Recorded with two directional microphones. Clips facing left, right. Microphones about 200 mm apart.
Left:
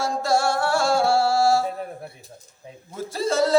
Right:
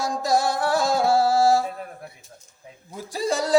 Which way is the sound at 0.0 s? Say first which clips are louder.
Even; 15° right (ahead or behind).